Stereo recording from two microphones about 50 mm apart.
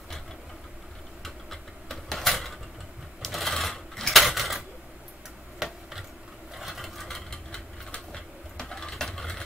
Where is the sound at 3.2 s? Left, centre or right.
Centre.